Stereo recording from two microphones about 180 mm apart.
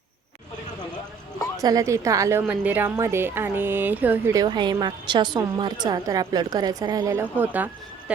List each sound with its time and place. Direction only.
1.5 s a woman's voice: 20° right (ahead or behind)
4.4 s a woman's voice: 25° right (ahead or behind); by 8.1 s 10° right (ahead or behind)